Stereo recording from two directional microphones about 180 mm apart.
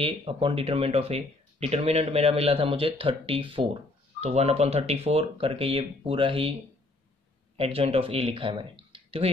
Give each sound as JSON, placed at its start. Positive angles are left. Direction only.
{"t": 0.0, "sound": "speech", "side_deg": -30}
{"t": 7.5, "sound": "speech", "side_deg": -35}